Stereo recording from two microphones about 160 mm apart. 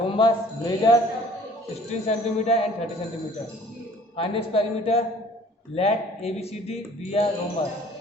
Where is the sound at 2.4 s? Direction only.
40° left (ahead or behind).